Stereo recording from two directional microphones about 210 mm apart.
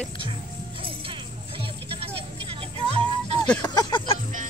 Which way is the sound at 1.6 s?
25° right (ahead or behind).